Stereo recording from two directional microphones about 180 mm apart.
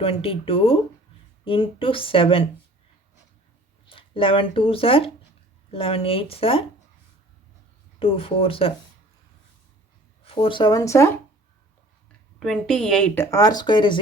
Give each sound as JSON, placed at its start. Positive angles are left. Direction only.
{"t": 0.0, "sound": "speech", "side_deg": 30}
{"t": 3.8, "sound": "speech", "side_deg": 30}
{"t": 7.9, "sound": "speech", "side_deg": 30}
{"t": 10.2, "sound": "speech", "side_deg": 30}
{"t": 12.4, "sound": "a woman's voice", "side_deg": 5}
{"t": 13.3, "sound": "speech", "side_deg": 20}